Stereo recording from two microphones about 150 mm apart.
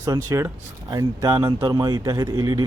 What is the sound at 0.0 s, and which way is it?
Speech, 20° right (ahead or behind).